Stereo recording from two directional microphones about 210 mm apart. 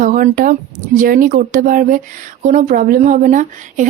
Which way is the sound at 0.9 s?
40° right (ahead or behind).